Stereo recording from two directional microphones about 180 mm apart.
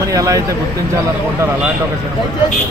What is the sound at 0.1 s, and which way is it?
Speech, 20° right (ahead or behind).